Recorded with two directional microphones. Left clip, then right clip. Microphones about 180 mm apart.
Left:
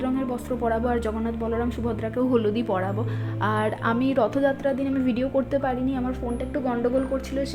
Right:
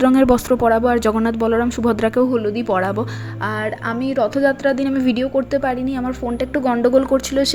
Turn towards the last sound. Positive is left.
turn(degrees=-40)  # may be behind; listen again after turning